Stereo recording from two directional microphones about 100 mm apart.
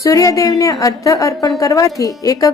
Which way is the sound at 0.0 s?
35° left (ahead or behind).